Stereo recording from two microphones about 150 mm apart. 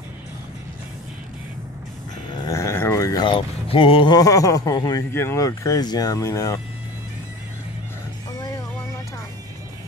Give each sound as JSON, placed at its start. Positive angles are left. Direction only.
{"t": 2.4, "sound": "a sound", "side_deg": 20}
{"t": 5.1, "sound": "speech", "side_deg": 15}
{"t": 8.3, "sound": "music", "side_deg": 25}